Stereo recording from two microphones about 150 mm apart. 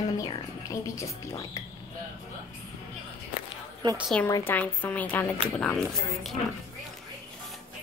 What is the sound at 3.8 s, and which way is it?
Speech, 30° right (ahead or behind).